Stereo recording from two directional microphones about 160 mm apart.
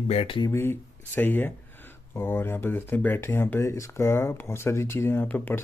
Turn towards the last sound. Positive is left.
turn(degrees=10)  # may be behind; listen again after turning